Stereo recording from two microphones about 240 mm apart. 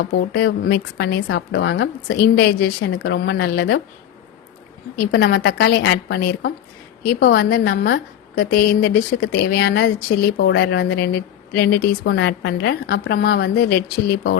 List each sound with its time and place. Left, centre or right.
0.0 s a woman's voice: left
4.9 s a woman's voice: left